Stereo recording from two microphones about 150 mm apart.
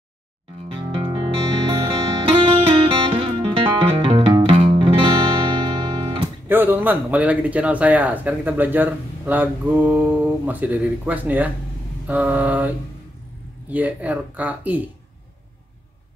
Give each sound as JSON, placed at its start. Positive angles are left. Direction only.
{"t": 0.7, "sound": "music", "side_deg": -35}
{"t": 6.5, "sound": "speech", "side_deg": -15}